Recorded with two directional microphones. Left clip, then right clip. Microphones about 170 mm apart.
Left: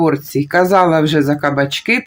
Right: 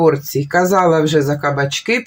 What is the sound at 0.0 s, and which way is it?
Speech, 25° left (ahead or behind).